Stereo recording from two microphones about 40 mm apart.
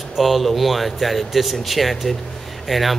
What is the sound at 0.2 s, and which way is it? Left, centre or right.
A man's voice, centre.